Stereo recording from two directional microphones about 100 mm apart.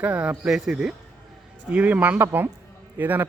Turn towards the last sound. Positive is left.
turn(degrees=-15)  # may be behind; listen again after turning